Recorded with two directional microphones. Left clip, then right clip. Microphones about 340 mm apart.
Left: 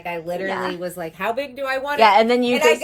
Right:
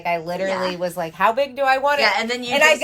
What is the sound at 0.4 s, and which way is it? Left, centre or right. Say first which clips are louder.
Speech: right 3 dB; centre.